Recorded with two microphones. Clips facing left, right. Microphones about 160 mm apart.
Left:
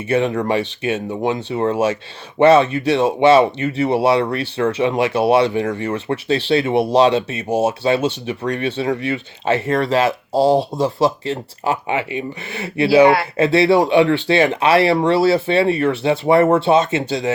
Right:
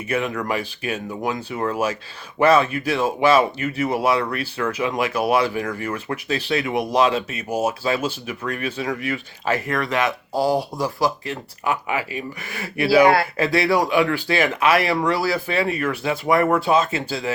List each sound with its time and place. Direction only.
0.1 s speech: 30° left (ahead or behind)